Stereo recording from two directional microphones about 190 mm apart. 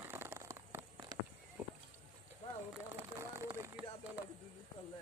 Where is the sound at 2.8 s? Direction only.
15° right (ahead or behind).